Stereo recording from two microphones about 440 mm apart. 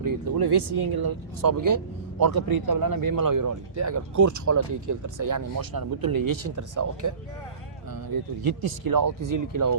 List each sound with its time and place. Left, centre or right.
0.0 s speech: right
8.1 s speech: right